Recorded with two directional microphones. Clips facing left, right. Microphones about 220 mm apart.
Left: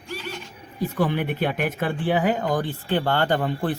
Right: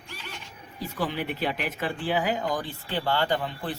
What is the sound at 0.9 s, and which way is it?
Speech, 55° left (ahead or behind).